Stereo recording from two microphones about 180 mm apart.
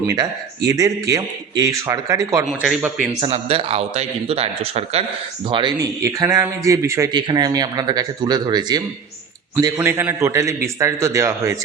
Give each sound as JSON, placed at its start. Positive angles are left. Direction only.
{"t": 0.7, "sound": "a man's voice", "side_deg": -20}
{"t": 2.4, "sound": "speech", "side_deg": -5}
{"t": 3.2, "sound": "a man's voice", "side_deg": -30}